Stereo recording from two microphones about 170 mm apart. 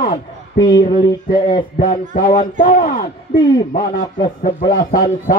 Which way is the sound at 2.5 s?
50° left (ahead or behind).